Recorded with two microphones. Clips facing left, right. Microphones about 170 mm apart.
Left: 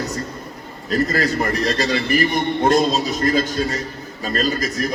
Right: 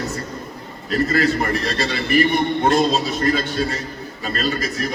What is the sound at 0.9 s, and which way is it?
A man's voice, 40° left (ahead or behind).